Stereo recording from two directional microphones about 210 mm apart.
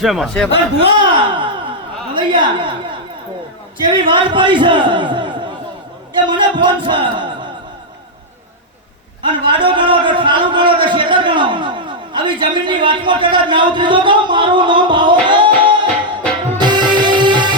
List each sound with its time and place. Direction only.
0.0 s a man's voice: centre (ahead or behind)
0.8 s a sound: 20° right (ahead or behind)
2.1 s a woman's voice: 20° right (ahead or behind)
3.8 s a man's voice: 25° right (ahead or behind)
9.2 s a man's voice: 25° right (ahead or behind)
16.6 s music: 20° right (ahead or behind)